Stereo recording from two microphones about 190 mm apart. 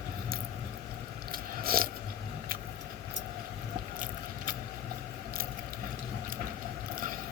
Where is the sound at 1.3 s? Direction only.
50° right (ahead or behind).